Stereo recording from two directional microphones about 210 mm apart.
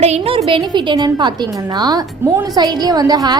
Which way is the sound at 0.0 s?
30° right (ahead or behind).